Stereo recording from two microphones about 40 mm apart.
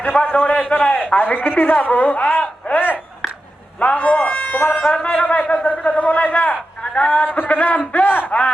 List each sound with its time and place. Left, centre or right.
0.0 s a man's voice: left
3.8 s a sound: left
5.0 s a man's voice: left